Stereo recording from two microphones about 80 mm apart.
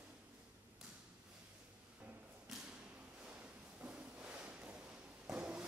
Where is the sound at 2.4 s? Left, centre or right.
Centre.